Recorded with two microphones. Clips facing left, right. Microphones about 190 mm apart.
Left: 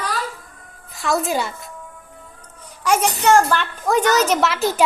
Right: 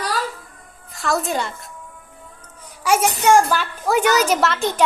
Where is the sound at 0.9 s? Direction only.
Centre (ahead or behind).